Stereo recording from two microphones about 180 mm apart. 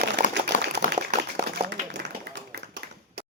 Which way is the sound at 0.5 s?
45° left (ahead or behind).